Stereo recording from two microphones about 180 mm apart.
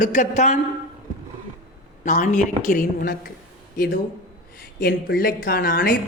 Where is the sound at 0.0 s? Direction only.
45° left (ahead or behind).